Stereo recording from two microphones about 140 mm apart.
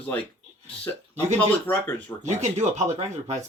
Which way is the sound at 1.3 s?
10° left (ahead or behind).